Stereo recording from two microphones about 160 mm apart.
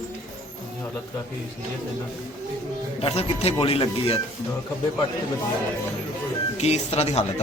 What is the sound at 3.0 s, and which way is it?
Speech, 40° left (ahead or behind).